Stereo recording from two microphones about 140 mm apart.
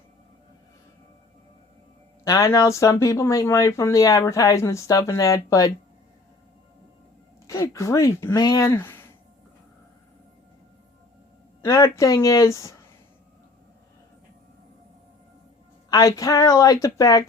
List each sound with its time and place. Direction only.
2.2 s speech: 25° left (ahead or behind)
7.4 s speech: 25° left (ahead or behind)
11.6 s speech: 20° left (ahead or behind)
15.9 s speech: 25° left (ahead or behind)